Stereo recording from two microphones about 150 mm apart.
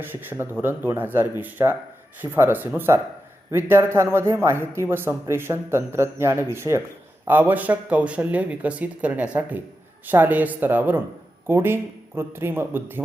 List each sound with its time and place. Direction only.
0.0 s speech: 15° right (ahead or behind)